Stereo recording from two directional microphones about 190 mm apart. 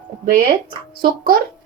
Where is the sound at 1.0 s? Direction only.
50° right (ahead or behind).